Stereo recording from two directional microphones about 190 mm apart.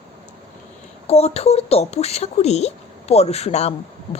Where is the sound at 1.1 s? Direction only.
35° left (ahead or behind).